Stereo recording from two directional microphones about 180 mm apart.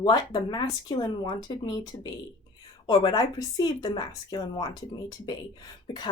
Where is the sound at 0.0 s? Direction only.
25° left (ahead or behind).